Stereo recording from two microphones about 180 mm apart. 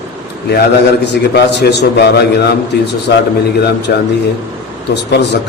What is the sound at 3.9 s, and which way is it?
A man's voice, 60° left (ahead or behind).